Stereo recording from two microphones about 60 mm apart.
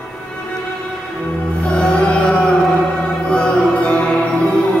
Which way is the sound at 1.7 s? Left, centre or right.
Centre.